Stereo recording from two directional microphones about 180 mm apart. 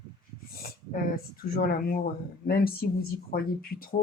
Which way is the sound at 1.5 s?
55° left (ahead or behind).